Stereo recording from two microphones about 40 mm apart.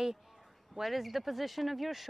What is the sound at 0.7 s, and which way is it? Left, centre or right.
Speech, centre.